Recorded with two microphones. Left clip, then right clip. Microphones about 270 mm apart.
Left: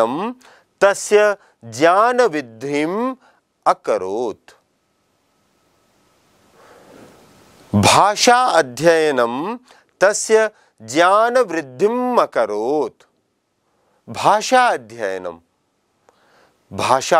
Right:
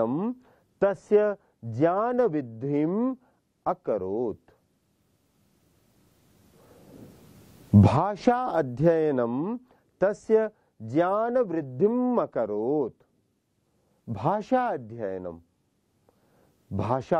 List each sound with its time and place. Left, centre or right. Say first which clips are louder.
0.0 s speech: left 9 dB; centre
6.6 s a sound: left 8 dB; centre
7.8 s speech: left 13 dB; centre
12.4 s speech: left 8 dB; centre
12.8 s speech: left 8 dB; centre
14.1 s speech: left 12 dB; centre
16.1 s a sound: left 11 dB; centre